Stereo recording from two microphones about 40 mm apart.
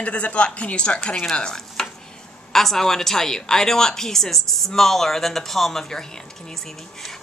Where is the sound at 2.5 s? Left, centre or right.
Centre.